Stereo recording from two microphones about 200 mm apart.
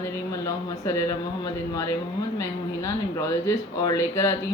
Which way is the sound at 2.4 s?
15° left (ahead or behind).